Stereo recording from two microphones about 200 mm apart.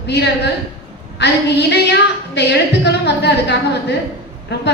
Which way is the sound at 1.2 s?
55° left (ahead or behind).